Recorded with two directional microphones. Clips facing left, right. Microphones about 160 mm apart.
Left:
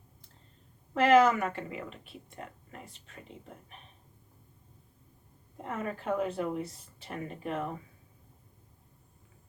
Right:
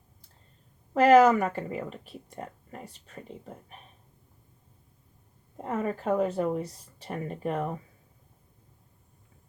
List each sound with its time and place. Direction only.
0.9 s speech: 40° right (ahead or behind)
5.6 s speech: 40° right (ahead or behind)